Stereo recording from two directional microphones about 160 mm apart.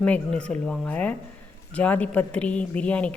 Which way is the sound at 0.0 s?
5° left (ahead or behind).